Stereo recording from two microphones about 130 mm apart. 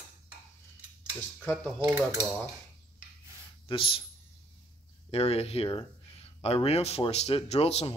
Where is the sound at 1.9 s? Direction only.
25° right (ahead or behind).